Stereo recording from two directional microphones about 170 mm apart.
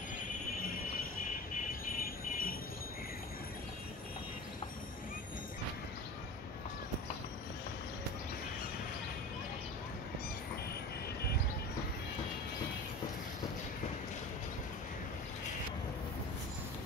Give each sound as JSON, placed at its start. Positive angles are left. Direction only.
{"t": 2.0, "sound": "jingle bell", "side_deg": 60}